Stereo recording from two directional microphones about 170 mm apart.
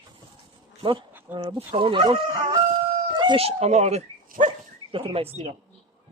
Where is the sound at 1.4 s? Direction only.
35° right (ahead or behind).